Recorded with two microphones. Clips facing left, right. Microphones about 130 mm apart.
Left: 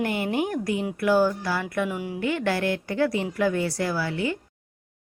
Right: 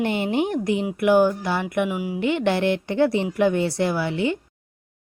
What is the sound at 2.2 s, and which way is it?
A woman's voice, 20° right (ahead or behind).